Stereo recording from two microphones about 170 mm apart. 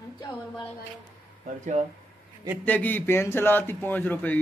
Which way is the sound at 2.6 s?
10° left (ahead or behind).